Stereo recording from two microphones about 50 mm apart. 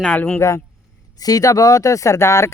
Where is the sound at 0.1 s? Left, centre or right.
Left.